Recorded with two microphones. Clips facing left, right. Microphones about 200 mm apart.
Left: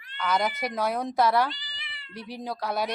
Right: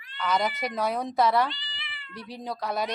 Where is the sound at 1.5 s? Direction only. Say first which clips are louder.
Right 1 dB; 40° left (ahead or behind).